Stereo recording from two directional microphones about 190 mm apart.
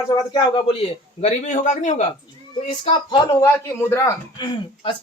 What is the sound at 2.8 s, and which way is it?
Speech, 25° left (ahead or behind).